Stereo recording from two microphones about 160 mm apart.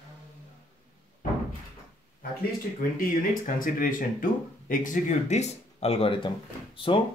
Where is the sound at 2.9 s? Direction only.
60° left (ahead or behind).